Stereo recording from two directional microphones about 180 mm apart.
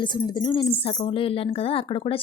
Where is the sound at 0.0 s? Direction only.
25° left (ahead or behind).